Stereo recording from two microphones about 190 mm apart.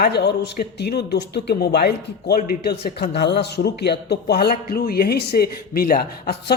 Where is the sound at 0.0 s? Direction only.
60° left (ahead or behind).